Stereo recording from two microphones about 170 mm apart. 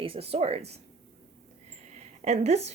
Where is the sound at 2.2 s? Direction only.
40° right (ahead or behind).